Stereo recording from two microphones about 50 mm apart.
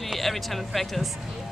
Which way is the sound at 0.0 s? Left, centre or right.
Centre.